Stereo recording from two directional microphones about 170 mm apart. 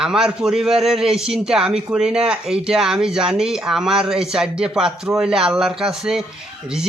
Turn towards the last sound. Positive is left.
turn(degrees=-5)  # may be behind; listen again after turning